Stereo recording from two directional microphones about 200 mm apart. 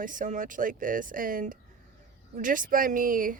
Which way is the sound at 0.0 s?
40° right (ahead or behind).